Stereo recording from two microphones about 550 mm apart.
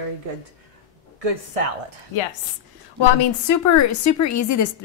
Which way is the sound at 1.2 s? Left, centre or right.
Right.